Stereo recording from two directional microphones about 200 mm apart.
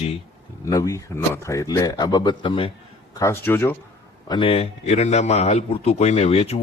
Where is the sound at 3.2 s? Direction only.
10° left (ahead or behind).